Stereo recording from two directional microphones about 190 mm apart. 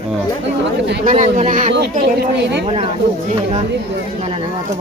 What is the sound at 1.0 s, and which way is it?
Speech, 40° right (ahead or behind).